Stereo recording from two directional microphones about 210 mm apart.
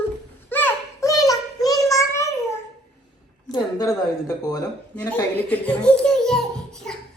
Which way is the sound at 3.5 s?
15° left (ahead or behind).